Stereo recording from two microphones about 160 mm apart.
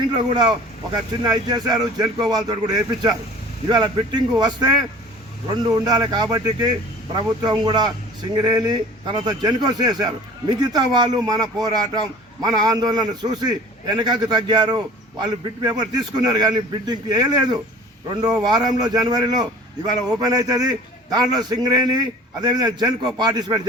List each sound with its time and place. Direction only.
0.1 s a man's voice: 30° right (ahead or behind)
5.7 s a man's voice: 25° right (ahead or behind)